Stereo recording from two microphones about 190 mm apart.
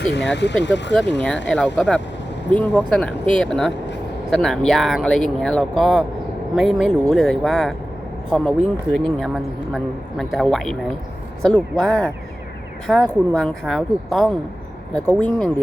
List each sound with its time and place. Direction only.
0.0 s speech: 65° left (ahead or behind)
1.5 s speech: 5° left (ahead or behind)